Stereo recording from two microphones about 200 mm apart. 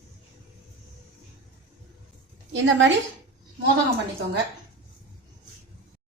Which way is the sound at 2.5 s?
70° right (ahead or behind).